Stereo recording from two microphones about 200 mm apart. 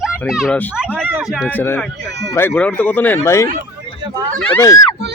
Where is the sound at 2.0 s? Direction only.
60° right (ahead or behind).